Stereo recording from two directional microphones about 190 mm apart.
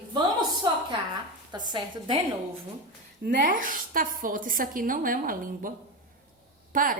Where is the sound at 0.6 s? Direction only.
20° right (ahead or behind).